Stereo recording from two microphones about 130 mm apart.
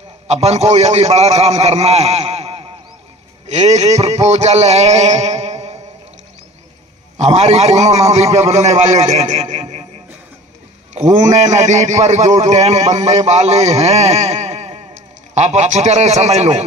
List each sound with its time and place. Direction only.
0.3 s a man's voice: 55° right (ahead or behind)
3.4 s a sound: 60° right (ahead or behind)
7.2 s a man's voice: 60° right (ahead or behind)
11.0 s a man's voice: 65° right (ahead or behind)